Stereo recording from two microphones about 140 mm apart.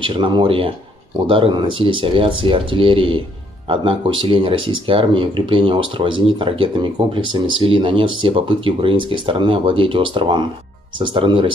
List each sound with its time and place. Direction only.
0.0 s speech: 35° right (ahead or behind)